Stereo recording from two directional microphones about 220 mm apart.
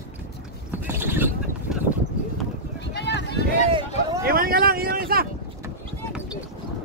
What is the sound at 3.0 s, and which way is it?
Run, 50° left (ahead or behind).